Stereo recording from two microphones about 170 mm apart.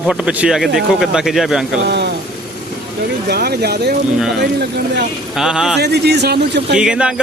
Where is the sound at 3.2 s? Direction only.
70° right (ahead or behind).